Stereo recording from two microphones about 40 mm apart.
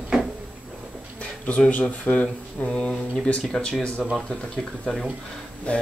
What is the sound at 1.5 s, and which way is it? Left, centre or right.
Speech, left.